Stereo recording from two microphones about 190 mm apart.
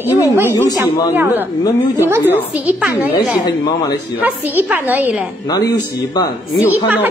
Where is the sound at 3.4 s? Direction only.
20° left (ahead or behind).